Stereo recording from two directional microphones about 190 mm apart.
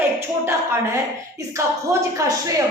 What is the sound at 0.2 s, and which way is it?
A woman's voice, 15° right (ahead or behind).